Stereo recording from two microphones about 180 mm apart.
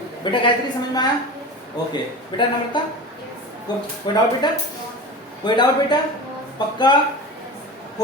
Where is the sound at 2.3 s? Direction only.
25° left (ahead or behind).